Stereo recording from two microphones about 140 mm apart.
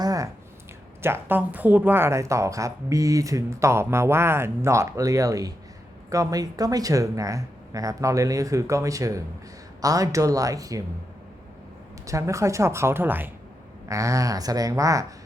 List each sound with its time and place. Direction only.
0.0 s a sound: 25° right (ahead or behind)
1.0 s speech: 15° right (ahead or behind)
12.0 s speech: 20° right (ahead or behind)